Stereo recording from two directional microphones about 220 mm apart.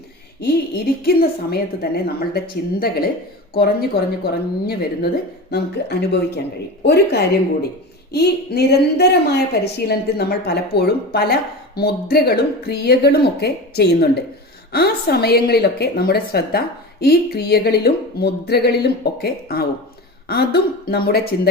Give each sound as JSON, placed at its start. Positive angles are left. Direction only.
{"t": 0.3, "sound": "a woman's voice", "side_deg": 45}